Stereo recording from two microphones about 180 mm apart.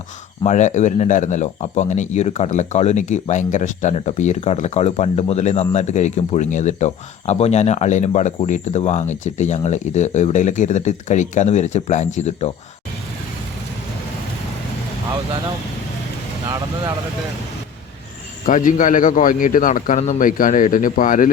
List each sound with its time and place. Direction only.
0.4 s a man's voice: 40° left (ahead or behind)
18.4 s speech: 45° left (ahead or behind)